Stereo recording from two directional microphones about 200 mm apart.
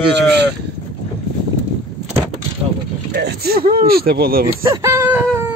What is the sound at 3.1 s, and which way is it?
Speech, 50° right (ahead or behind).